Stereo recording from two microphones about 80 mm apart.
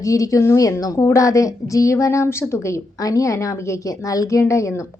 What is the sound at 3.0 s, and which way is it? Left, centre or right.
A woman's voice, left.